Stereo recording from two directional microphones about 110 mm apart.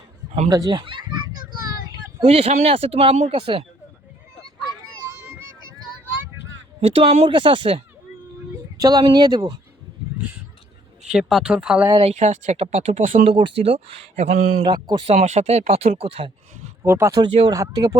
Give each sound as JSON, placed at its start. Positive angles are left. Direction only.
{"t": 0.4, "sound": "speech", "side_deg": -35}
{"t": 2.2, "sound": "speech", "side_deg": -65}
{"t": 5.0, "sound": "a sound", "side_deg": -25}
{"t": 6.8, "sound": "speech", "side_deg": -60}
{"t": 8.8, "sound": "speech", "side_deg": -35}
{"t": 11.1, "sound": "speech", "side_deg": -5}
{"t": 11.9, "sound": "speech", "side_deg": -80}
{"t": 13.3, "sound": "speech", "side_deg": -55}
{"t": 15.0, "sound": "speech", "side_deg": -90}
{"t": 16.8, "sound": "speech", "side_deg": -20}
{"t": 17.5, "sound": "speech", "side_deg": -35}